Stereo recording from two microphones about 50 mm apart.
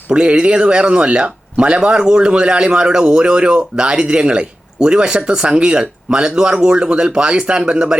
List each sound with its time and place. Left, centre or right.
0.1 s speech: right